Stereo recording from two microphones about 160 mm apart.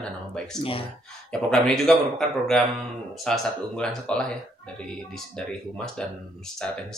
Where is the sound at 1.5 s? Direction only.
Centre (ahead or behind).